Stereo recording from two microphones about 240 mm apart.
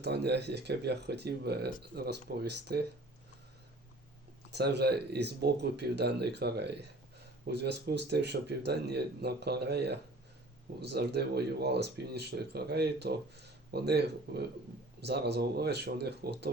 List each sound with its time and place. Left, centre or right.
0.0 s speech: right
4.5 s speech: right